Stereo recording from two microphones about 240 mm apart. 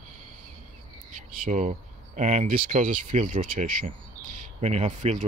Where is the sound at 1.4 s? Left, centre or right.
Right.